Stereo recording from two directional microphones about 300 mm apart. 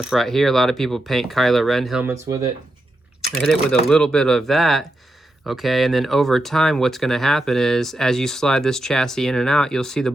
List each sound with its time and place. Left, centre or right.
0.0 s speech: centre
3.2 s speech: centre